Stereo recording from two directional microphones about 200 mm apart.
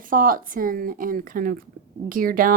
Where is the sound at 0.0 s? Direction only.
45° right (ahead or behind).